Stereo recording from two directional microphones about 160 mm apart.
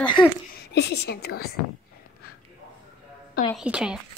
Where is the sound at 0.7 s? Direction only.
90° left.